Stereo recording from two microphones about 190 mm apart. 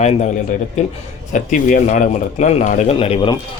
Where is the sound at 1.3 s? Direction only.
40° left (ahead or behind).